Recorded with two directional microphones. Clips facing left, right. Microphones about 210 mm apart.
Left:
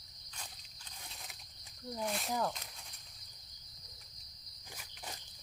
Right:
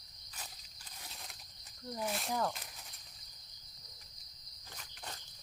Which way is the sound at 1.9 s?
5° right (ahead or behind).